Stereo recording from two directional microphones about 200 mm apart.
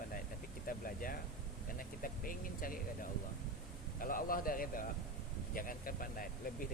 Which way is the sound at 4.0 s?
45° left (ahead or behind).